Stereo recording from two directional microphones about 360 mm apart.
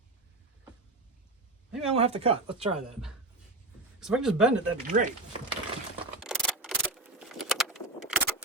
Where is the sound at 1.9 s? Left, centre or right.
Centre.